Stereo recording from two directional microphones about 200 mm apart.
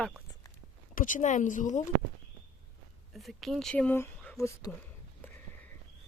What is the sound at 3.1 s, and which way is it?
Speech, centre (ahead or behind).